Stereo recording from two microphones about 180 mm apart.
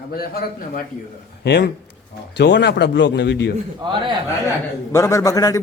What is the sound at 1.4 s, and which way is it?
Speech, 70° left (ahead or behind).